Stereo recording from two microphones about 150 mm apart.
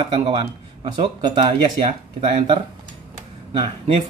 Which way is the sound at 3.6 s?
40° right (ahead or behind).